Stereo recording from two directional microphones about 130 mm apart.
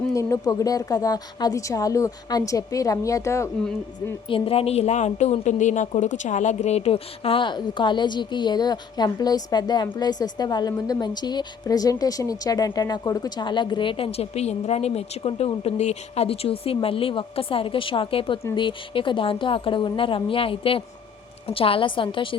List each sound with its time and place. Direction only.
0.1 s a woman's voice: 25° left (ahead or behind)
4.3 s a woman's voice: 45° left (ahead or behind)